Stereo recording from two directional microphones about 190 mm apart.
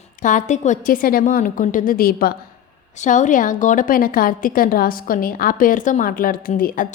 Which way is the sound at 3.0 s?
40° left (ahead or behind).